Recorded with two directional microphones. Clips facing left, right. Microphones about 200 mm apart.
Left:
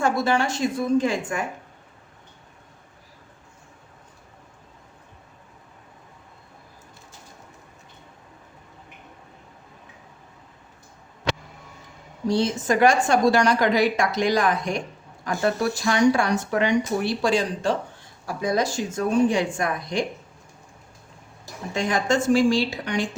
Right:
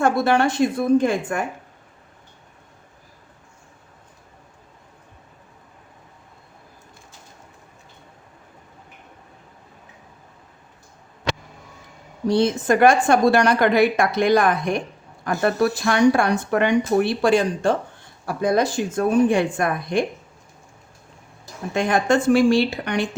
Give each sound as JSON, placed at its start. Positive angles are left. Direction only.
{"t": 0.0, "sound": "speech", "side_deg": -60}
{"t": 12.3, "sound": "speech", "side_deg": -60}
{"t": 21.7, "sound": "speech", "side_deg": -60}